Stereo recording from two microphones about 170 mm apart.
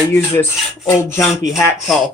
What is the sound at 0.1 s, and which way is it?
Speech, 15° left (ahead or behind).